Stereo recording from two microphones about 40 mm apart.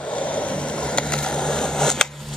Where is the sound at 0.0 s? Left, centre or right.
Left; by 2.0 s centre.